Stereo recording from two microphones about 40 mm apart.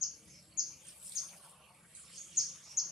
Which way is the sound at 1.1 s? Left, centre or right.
Centre.